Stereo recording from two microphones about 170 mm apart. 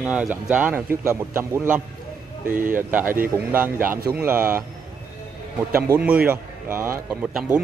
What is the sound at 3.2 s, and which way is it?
Speech, 10° right (ahead or behind).